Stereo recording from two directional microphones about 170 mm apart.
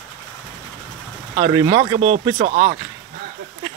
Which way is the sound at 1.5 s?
25° right (ahead or behind).